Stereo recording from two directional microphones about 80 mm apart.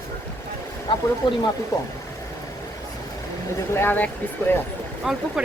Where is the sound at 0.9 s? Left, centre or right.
Left.